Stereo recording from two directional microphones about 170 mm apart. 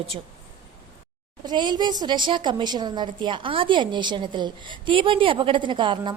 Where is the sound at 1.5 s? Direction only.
25° right (ahead or behind).